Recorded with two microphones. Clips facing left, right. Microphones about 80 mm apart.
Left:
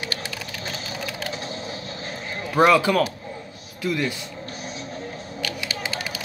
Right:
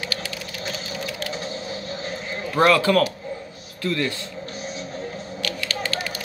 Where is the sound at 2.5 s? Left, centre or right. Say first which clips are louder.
Even; centre.